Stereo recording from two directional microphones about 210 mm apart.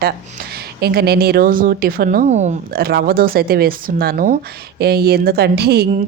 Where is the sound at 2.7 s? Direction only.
45° right (ahead or behind).